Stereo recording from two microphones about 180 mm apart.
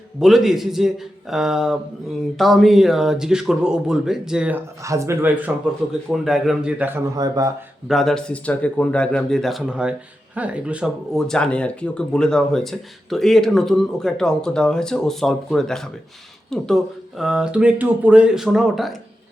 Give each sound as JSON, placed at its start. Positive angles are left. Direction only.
{"t": 0.2, "sound": "speech", "side_deg": 0}
{"t": 5.9, "sound": "speech", "side_deg": 0}
{"t": 7.2, "sound": "speech", "side_deg": -20}
{"t": 7.9, "sound": "speech", "side_deg": 0}